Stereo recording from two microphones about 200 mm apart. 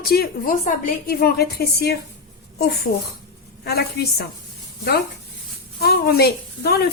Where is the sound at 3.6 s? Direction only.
50° left (ahead or behind).